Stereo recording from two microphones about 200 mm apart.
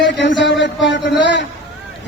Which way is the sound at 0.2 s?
65° left (ahead or behind).